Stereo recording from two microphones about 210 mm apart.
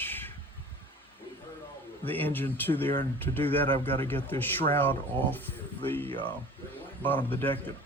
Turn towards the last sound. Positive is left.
turn(degrees=10)  # may be behind; listen again after turning